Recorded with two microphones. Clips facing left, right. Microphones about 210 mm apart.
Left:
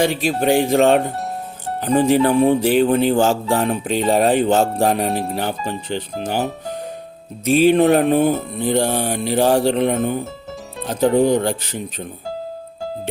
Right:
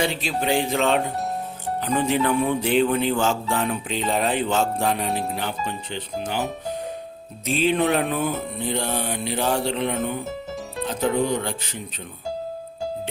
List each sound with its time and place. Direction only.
0.0 s mantra: 50° left (ahead or behind)
1.8 s speech: 40° left (ahead or behind)
7.7 s mantra: 45° left (ahead or behind)
10.8 s speech: 40° left (ahead or behind)